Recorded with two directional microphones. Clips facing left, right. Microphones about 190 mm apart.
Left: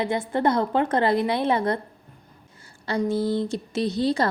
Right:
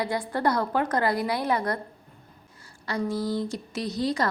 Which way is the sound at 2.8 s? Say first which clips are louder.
Left 4 dB; 25° left (ahead or behind).